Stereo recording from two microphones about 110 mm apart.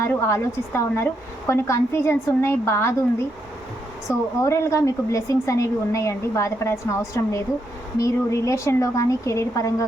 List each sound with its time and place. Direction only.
0.3 s a woman's voice: 25° left (ahead or behind)